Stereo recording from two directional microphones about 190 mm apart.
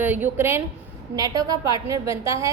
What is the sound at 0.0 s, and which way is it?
A woman's voice, 10° right (ahead or behind).